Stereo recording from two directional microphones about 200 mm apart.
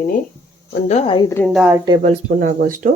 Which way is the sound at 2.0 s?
40° right (ahead or behind).